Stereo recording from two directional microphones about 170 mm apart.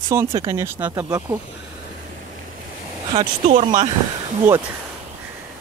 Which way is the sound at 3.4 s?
45° right (ahead or behind).